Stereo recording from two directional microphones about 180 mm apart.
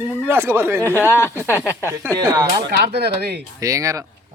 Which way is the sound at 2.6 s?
65° right (ahead or behind).